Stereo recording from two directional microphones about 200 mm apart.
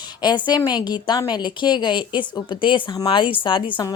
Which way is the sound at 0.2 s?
20° left (ahead or behind).